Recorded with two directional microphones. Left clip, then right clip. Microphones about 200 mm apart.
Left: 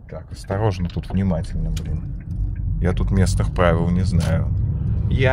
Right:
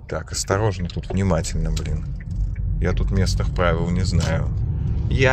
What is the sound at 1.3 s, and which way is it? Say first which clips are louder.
Speech: right 4 dB; 15° right (ahead or behind).